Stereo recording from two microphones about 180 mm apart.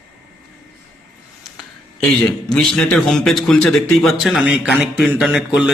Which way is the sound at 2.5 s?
5° left (ahead or behind).